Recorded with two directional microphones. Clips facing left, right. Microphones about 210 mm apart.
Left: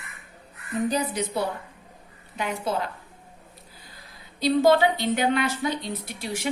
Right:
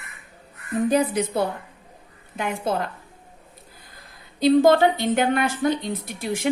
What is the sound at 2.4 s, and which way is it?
Speech, 50° right (ahead or behind).